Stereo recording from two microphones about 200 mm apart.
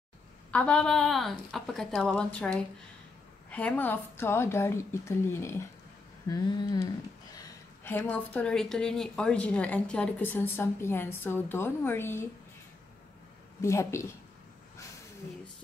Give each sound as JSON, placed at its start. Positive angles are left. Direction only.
{"t": 0.5, "sound": "a woman's voice", "side_deg": 5}
{"t": 6.2, "sound": "a sound", "side_deg": 20}
{"t": 7.3, "sound": "a woman's voice", "side_deg": 10}
{"t": 13.6, "sound": "a woman's voice", "side_deg": 15}